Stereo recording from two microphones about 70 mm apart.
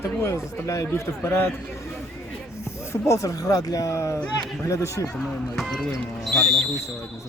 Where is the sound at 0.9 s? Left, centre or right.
Left.